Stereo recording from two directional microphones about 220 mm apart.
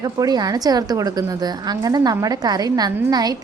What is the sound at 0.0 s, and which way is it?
A woman's voice, 15° right (ahead or behind).